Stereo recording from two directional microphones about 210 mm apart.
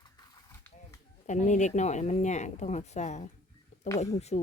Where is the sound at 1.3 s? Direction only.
35° left (ahead or behind).